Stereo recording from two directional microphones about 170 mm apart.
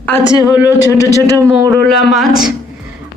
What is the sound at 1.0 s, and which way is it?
Speech, 20° left (ahead or behind).